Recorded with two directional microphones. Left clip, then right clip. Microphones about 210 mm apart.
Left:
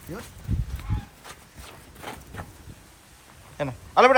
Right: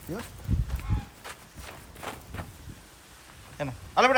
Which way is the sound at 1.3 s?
Centre (ahead or behind).